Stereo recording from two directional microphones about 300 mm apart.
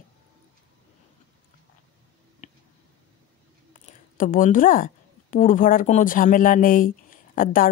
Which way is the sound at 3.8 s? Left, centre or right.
Left.